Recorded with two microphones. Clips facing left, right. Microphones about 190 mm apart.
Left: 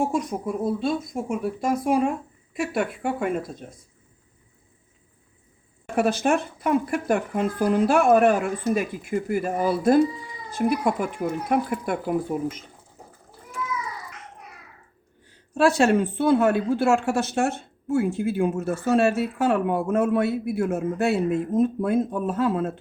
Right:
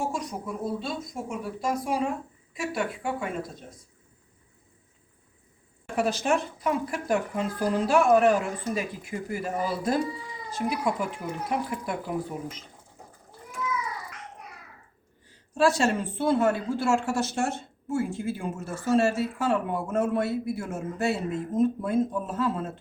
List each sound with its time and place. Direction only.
0.1 s speech: 55° left (ahead or behind)
6.0 s speech: 55° left (ahead or behind)
15.5 s speech: 60° left (ahead or behind)